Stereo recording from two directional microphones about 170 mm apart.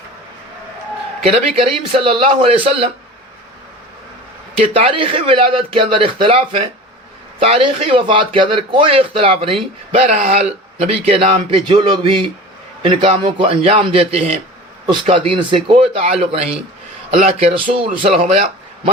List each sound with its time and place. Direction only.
1.5 s a man's voice: 30° right (ahead or behind)
4.7 s a man's voice: 35° right (ahead or behind)